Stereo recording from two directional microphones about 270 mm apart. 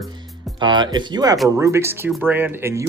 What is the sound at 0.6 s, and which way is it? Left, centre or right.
Speech, centre.